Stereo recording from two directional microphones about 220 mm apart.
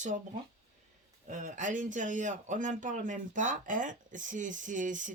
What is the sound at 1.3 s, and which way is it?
Speech, 35° right (ahead or behind).